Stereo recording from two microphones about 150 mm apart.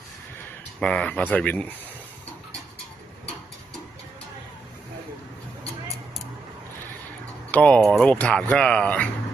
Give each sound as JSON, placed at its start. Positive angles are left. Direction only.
{"t": 0.8, "sound": "speech", "side_deg": 5}
{"t": 7.5, "sound": "speech", "side_deg": 10}